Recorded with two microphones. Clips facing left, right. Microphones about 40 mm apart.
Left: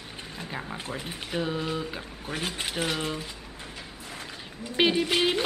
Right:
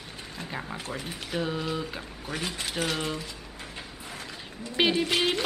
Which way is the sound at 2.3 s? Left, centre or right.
Left.